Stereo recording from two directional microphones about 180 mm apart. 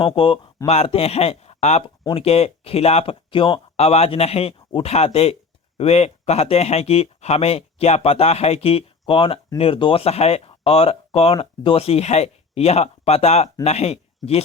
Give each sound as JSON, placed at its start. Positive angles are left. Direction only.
{"t": 0.0, "sound": "speech", "side_deg": 30}